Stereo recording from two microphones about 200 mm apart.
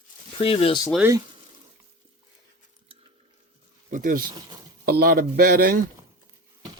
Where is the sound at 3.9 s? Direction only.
40° right (ahead or behind).